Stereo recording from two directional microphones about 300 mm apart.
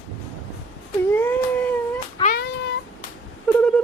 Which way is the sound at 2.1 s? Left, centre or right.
Left.